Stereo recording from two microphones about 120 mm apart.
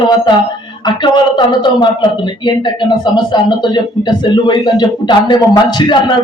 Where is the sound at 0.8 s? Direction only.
40° left (ahead or behind).